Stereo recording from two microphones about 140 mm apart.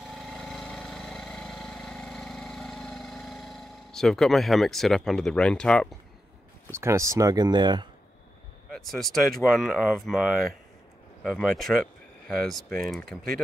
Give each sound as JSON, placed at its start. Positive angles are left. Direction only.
{"t": 0.0, "sound": "lawn mower", "side_deg": 0}
{"t": 6.7, "sound": "speech", "side_deg": -20}
{"t": 8.7, "sound": "speech", "side_deg": 0}